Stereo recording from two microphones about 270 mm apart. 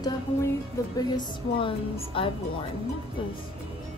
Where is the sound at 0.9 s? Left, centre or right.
Centre.